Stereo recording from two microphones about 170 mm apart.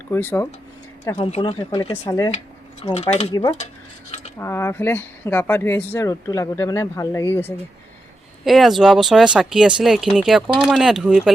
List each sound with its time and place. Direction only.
0.1 s speech: 15° left (ahead or behind)
1.1 s speech: 40° left (ahead or behind)
1.4 s speech: 30° left (ahead or behind)
2.9 s speech: 40° left (ahead or behind)
4.4 s speech: 15° left (ahead or behind)
8.4 s speech: centre (ahead or behind)